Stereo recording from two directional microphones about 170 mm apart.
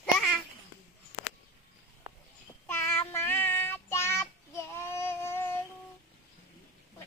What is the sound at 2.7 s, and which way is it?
Child singing, 15° left (ahead or behind).